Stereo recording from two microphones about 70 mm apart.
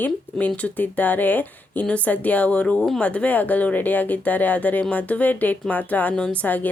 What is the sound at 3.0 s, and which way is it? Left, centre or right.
Speech, centre.